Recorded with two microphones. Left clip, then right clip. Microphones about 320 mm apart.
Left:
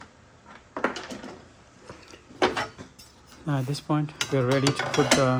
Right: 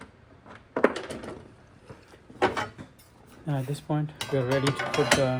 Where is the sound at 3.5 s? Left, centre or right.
Left.